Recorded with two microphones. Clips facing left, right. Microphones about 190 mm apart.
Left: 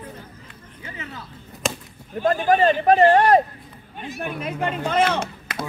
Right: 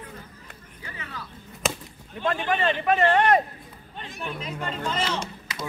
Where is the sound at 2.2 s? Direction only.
45° left (ahead or behind).